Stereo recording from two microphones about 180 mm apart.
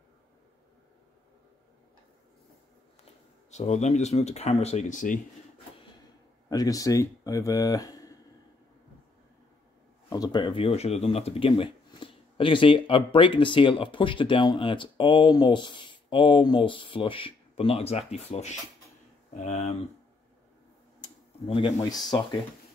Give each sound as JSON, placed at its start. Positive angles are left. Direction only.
{"t": 3.4, "sound": "speech", "side_deg": 40}
{"t": 6.5, "sound": "speech", "side_deg": 20}
{"t": 10.0, "sound": "speech", "side_deg": 20}
{"t": 21.0, "sound": "a sound", "side_deg": 30}
{"t": 21.7, "sound": "speech", "side_deg": 20}